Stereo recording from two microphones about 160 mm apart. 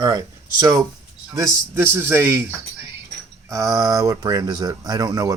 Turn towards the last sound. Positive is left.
turn(degrees=-20)  # may be behind; listen again after turning